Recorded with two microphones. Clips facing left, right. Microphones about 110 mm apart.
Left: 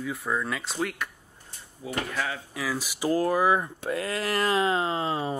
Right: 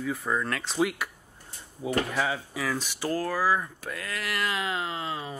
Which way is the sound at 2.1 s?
10° right (ahead or behind).